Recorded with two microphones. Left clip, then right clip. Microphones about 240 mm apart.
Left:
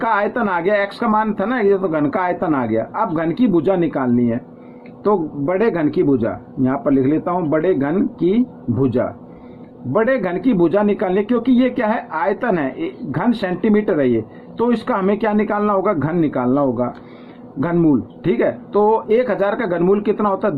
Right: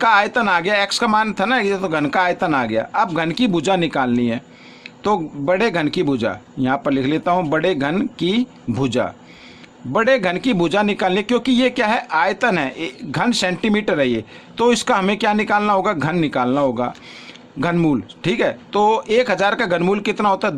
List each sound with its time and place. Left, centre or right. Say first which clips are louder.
0.0 s a man's voice: right 3 dB; right